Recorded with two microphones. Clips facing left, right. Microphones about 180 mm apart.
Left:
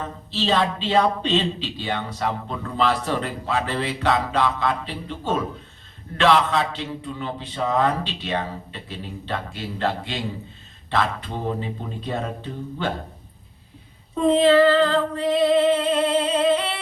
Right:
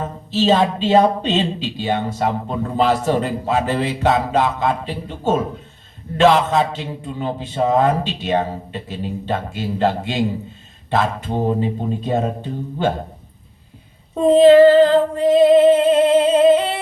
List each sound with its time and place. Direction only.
0.0 s a man's voice: 40° right (ahead or behind)
14.3 s a man's voice: 45° right (ahead or behind)